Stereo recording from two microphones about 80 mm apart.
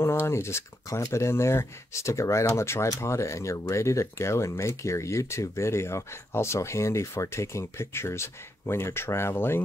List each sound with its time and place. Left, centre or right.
0.0 s speech: left